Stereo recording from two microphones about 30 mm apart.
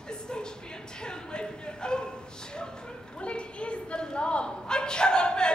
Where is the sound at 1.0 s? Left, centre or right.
Left.